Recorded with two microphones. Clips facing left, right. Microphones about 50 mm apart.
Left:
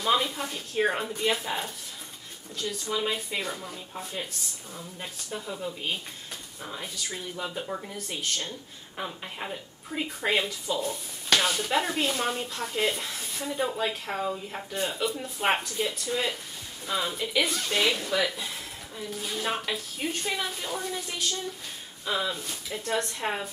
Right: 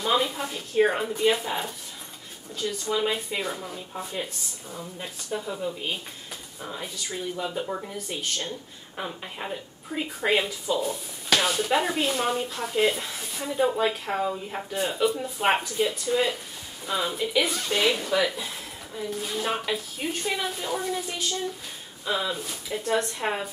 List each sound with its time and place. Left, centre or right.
0.0 s a woman's voice: centre